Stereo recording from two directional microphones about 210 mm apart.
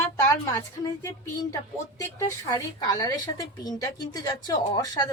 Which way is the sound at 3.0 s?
20° left (ahead or behind).